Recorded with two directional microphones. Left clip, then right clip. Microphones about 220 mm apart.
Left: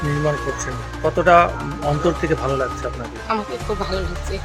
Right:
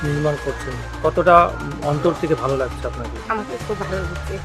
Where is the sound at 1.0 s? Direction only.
Centre (ahead or behind).